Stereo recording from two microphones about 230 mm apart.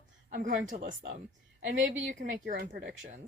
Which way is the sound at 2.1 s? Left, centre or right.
Right.